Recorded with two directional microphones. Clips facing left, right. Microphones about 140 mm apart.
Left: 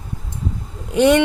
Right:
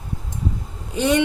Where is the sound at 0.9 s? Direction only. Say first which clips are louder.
Left 6 dB; 65° left (ahead or behind).